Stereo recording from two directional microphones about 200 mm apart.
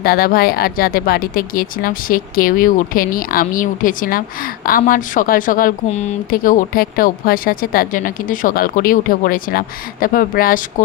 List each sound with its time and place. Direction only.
0.0 s speech: 50° left (ahead or behind)